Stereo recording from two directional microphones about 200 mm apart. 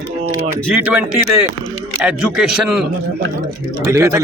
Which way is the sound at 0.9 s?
5° right (ahead or behind).